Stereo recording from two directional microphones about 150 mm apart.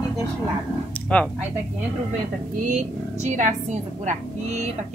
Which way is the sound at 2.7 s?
55° right (ahead or behind).